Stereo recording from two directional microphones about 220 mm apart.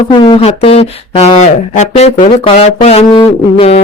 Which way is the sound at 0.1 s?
25° left (ahead or behind).